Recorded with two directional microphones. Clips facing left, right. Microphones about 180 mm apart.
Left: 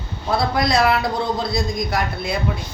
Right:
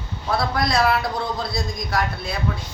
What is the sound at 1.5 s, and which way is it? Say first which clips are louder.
Speech: left 4 dB; 20° left (ahead or behind).